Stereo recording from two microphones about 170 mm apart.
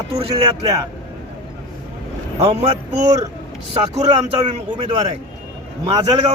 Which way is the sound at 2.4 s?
35° right (ahead or behind).